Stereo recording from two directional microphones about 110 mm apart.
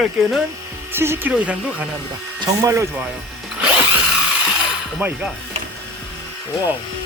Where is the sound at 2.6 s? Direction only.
30° right (ahead or behind).